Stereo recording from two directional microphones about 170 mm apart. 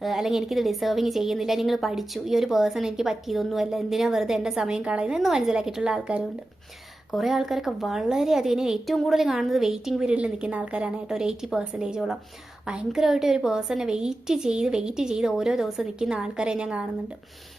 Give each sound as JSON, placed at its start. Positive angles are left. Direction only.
{"t": 0.0, "sound": "a woman's voice", "side_deg": 0}